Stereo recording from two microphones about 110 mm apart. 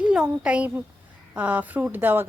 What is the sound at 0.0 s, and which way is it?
A child's voice, 10° right (ahead or behind).